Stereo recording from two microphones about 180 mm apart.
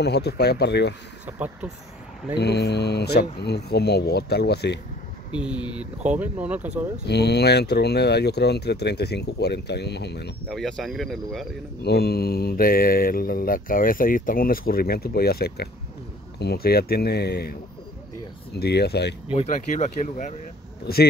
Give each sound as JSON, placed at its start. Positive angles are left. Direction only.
{"t": 0.0, "sound": "speech", "side_deg": 65}
{"t": 1.2, "sound": "speech", "side_deg": -10}
{"t": 2.3, "sound": "mantra", "side_deg": 65}
{"t": 5.3, "sound": "speech", "side_deg": -5}
{"t": 7.1, "sound": "speech", "side_deg": 65}
{"t": 10.5, "sound": "speech", "side_deg": 0}
{"t": 11.8, "sound": "mantra", "side_deg": 60}
{"t": 18.6, "sound": "mantra", "side_deg": 65}
{"t": 19.3, "sound": "speech", "side_deg": 40}
{"t": 20.8, "sound": "mantra", "side_deg": 60}